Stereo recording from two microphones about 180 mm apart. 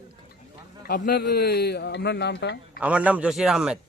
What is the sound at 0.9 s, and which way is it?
A man's voice, 60° left (ahead or behind).